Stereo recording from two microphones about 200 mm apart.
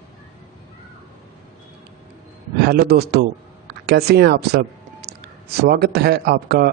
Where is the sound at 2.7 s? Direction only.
50° right (ahead or behind).